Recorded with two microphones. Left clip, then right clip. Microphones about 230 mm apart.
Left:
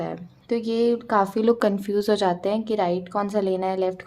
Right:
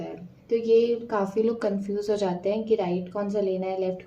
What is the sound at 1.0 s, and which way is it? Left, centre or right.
A woman's voice, left.